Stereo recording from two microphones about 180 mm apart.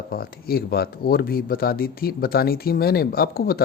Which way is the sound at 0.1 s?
55° left (ahead or behind).